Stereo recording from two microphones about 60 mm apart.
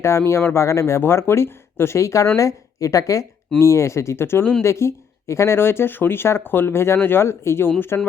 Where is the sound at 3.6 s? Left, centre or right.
Left.